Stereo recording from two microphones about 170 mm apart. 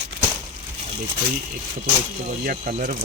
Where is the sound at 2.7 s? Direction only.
45° right (ahead or behind).